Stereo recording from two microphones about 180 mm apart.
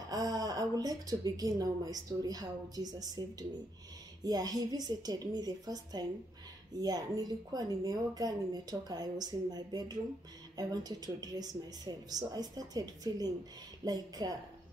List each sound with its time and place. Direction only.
0.1 s a woman's voice: 20° right (ahead or behind)